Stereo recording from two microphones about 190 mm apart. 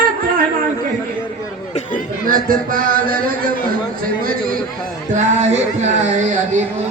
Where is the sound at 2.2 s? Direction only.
45° right (ahead or behind).